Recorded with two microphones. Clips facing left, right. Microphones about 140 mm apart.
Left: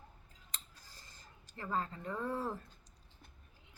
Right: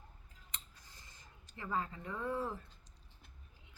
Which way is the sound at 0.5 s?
35° left (ahead or behind).